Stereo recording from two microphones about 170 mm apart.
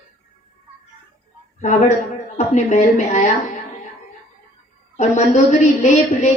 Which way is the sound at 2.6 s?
45° left (ahead or behind).